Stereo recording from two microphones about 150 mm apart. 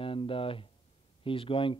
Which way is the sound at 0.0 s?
35° left (ahead or behind).